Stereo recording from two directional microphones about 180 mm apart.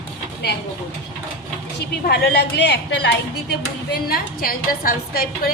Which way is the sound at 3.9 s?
55° left (ahead or behind).